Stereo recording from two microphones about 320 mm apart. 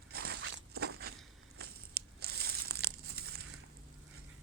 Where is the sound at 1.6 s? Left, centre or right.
Right.